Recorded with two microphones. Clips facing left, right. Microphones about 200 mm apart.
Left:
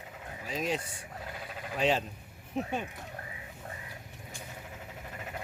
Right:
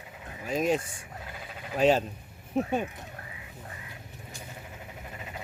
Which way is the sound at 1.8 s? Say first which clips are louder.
Right 6 dB; 45° right (ahead or behind).